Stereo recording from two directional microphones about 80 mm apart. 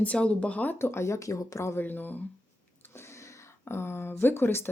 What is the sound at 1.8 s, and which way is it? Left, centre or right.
Speech, left.